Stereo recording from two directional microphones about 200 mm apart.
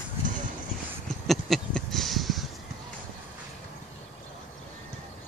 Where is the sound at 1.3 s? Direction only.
Centre (ahead or behind).